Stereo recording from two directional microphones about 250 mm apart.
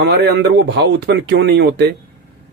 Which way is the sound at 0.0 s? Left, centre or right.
Right.